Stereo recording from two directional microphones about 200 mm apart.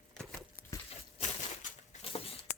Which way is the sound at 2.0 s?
30° left (ahead or behind).